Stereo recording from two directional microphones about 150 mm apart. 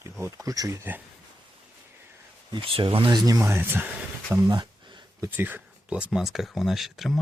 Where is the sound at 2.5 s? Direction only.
35° right (ahead or behind).